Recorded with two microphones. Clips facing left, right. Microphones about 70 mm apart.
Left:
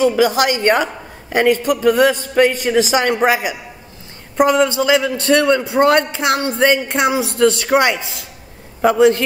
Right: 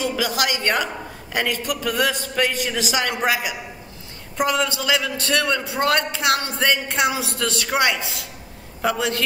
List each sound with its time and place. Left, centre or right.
0.0 s a man's voice: left